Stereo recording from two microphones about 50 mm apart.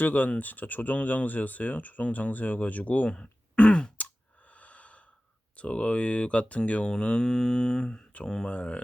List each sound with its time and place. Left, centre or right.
0.0 s speech: left
3.2 s throat clearing: left
4.5 s snort: left
5.5 s speech: left